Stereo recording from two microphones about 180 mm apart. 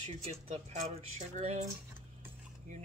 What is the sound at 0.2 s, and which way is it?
Speech, 35° right (ahead or behind).